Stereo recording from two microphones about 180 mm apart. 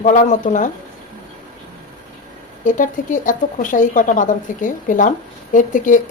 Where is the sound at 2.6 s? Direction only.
45° left (ahead or behind).